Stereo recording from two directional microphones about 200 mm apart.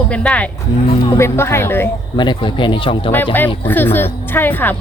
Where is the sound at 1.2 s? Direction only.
10° left (ahead or behind).